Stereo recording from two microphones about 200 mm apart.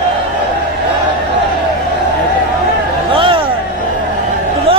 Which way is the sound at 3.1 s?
25° right (ahead or behind).